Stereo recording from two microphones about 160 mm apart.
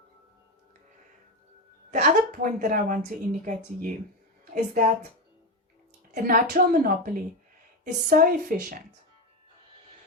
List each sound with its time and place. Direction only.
1.9 s a woman's voice: 55° right (ahead or behind)
6.2 s a woman's voice: 60° right (ahead or behind)